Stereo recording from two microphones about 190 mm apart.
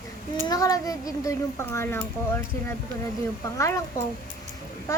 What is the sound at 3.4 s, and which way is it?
Speech, 15° left (ahead or behind).